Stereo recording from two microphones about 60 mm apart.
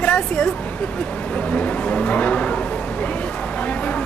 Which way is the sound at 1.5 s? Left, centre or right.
Left.